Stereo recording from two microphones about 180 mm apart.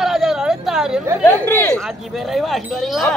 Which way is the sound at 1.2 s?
15° left (ahead or behind).